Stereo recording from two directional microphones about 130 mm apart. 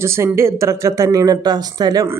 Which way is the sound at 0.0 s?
20° right (ahead or behind).